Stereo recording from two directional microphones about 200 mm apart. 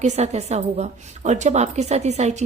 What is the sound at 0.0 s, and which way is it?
A woman's voice, 35° right (ahead or behind).